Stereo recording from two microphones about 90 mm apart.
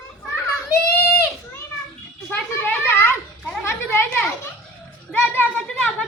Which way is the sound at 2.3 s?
20° left (ahead or behind).